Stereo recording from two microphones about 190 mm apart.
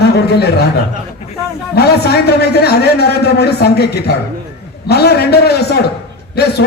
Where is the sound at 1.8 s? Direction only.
60° left (ahead or behind).